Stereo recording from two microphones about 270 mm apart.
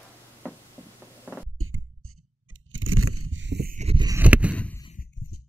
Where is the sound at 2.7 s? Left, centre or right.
Right; by 4.8 s centre.